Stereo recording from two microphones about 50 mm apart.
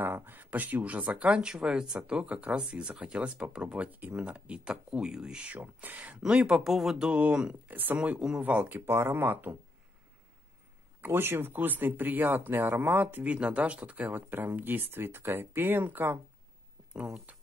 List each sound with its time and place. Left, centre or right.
0.0 s a sound: right
1.1 s speech: right
5.5 s speech: right
6.2 s speech: centre
6.5 s speech: centre
7.1 s speech: right
7.6 s speech: right
8.8 s speech: right
11.0 s speech: right
17.3 s a sound: right